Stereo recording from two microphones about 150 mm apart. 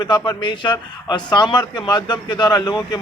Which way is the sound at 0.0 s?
30° left (ahead or behind).